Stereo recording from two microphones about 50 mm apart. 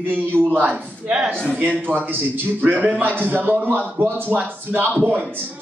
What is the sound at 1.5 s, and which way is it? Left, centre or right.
Speech, right.